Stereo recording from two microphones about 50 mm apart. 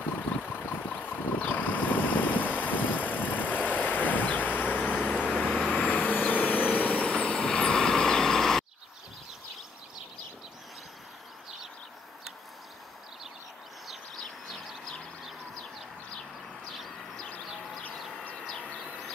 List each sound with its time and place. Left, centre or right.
0.0 s vehicle: left
4.8 s vehicle: centre
5.9 s vehicle: left; by 8.6 s centre
17.9 s bird: centre